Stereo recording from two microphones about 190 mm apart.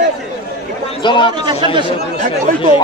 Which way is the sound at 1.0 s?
25° left (ahead or behind).